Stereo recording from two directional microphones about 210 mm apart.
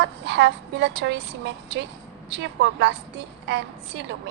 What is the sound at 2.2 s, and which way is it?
A woman's voice, 55° right (ahead or behind).